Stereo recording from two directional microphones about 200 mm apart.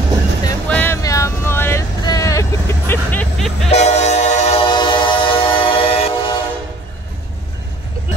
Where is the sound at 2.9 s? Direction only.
10° left (ahead or behind).